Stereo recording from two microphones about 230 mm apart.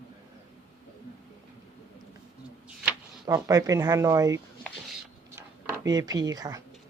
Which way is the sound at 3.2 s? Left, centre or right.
Centre.